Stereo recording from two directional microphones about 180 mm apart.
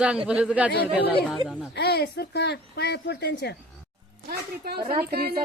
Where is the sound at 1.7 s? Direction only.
65° left (ahead or behind).